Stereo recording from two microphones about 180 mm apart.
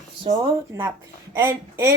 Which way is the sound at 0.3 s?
20° right (ahead or behind).